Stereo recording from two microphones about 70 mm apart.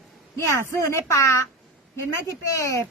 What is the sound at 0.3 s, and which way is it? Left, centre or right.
A woman's voice, left.